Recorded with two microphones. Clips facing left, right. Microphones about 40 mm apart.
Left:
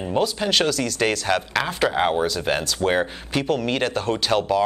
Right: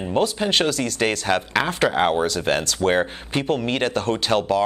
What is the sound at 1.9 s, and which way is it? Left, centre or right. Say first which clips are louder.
Speech: right 1 dB; centre.